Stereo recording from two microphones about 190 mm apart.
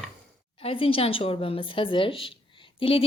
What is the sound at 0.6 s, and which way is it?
A woman's voice, 30° left (ahead or behind).